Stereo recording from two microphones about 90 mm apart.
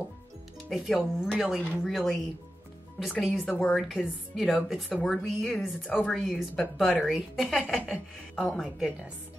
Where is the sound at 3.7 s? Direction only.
5° right (ahead or behind).